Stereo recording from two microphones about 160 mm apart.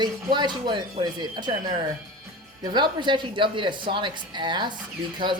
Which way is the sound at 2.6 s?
30° right (ahead or behind).